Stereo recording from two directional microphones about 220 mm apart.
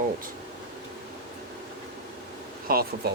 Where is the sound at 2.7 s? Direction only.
40° right (ahead or behind).